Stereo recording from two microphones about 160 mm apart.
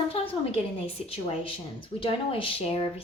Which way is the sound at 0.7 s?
35° left (ahead or behind).